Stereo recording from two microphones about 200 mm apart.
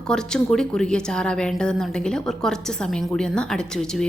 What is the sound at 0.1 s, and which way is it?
A woman's voice, 5° left (ahead or behind).